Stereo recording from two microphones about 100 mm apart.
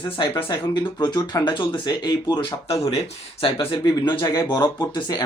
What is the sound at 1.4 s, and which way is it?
Speech, 50° left (ahead or behind).